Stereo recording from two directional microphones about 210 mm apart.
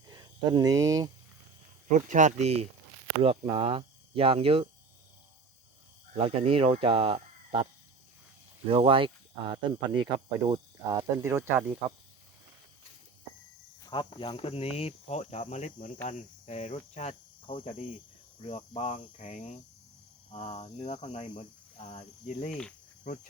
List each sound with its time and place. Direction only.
0.1 s speech: 20° right (ahead or behind)
1.9 s speech: 35° right (ahead or behind)
6.1 s speech: 25° right (ahead or behind)
13.8 s speech: 25° left (ahead or behind)
16.0 s cricket: 35° left (ahead or behind)